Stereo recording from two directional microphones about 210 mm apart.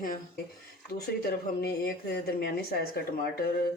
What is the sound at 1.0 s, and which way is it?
Speech, 45° left (ahead or behind).